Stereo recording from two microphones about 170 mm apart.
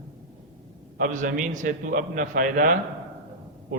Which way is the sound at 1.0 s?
50° right (ahead or behind).